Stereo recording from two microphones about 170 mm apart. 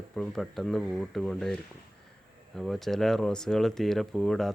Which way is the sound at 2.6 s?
Centre (ahead or behind).